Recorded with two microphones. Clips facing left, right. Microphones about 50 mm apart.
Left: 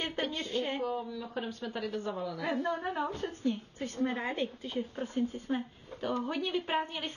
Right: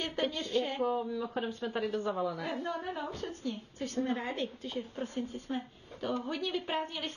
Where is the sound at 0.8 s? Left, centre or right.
Centre.